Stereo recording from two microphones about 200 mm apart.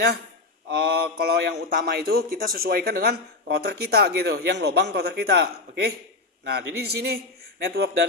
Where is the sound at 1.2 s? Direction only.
50° right (ahead or behind).